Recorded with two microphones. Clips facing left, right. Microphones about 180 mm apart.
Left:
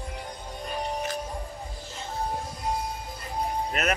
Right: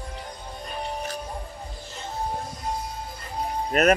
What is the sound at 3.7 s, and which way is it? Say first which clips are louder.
Speech: right 11 dB; 40° right (ahead or behind).